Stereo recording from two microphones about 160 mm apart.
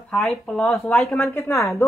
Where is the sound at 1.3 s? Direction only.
15° left (ahead or behind).